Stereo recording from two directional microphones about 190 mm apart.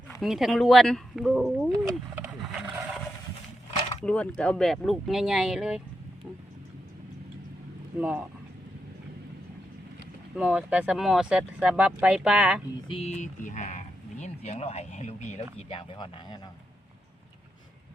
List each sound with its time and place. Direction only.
0.2 s speech: centre (ahead or behind)
1.7 s roaring cats: 10° right (ahead or behind)
4.0 s speech: 5° left (ahead or behind)
10.3 s speech: 5° right (ahead or behind)
12.9 s speech: 35° left (ahead or behind)